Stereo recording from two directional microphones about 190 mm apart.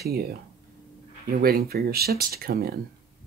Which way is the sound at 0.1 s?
55° right (ahead or behind).